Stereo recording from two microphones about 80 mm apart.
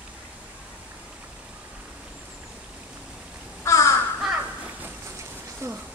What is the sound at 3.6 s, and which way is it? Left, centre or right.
Crow, left.